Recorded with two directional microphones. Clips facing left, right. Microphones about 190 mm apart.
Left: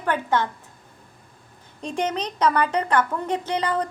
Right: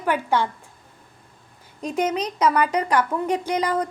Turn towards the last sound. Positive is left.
turn(degrees=-10)  # may be behind; listen again after turning